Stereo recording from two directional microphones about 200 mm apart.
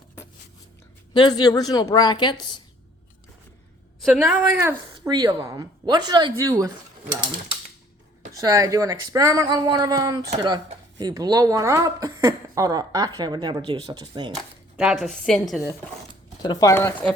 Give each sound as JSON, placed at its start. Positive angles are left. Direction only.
{"t": 1.1, "sound": "a woman's voice", "side_deg": 20}
{"t": 4.0, "sound": "a woman's voice", "side_deg": -5}
{"t": 14.8, "sound": "a woman's voice", "side_deg": 0}
{"t": 16.4, "sound": "speech", "side_deg": 20}